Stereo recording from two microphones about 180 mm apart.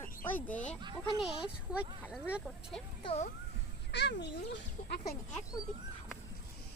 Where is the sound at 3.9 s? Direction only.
70° left (ahead or behind).